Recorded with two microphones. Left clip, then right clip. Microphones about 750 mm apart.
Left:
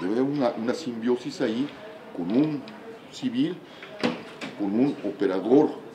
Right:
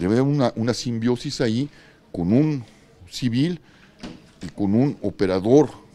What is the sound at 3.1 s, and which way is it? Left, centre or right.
Speech, right.